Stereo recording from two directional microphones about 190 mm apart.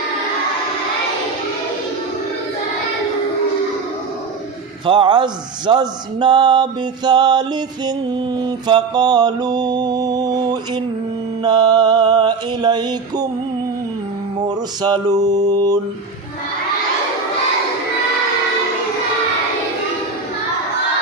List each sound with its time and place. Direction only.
4.9 s speech: 25° right (ahead or behind)
8.4 s mantra: 25° right (ahead or behind)
11.4 s speech: 20° right (ahead or behind)
14.3 s mantra: 20° right (ahead or behind)